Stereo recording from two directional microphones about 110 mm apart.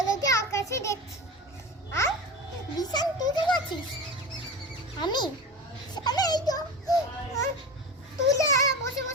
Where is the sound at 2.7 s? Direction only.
35° left (ahead or behind).